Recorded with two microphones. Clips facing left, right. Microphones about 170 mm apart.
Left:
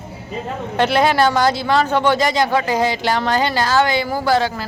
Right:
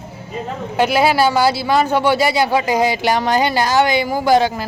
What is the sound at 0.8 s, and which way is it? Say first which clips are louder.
Speech: right 1 dB; 5° right (ahead or behind).